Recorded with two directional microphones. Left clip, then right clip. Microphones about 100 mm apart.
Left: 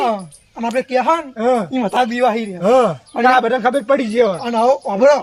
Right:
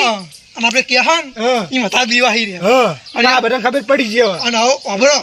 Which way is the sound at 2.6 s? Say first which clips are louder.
Even; 90° right.